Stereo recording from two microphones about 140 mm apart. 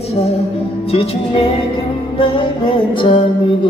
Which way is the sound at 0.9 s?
45° left (ahead or behind).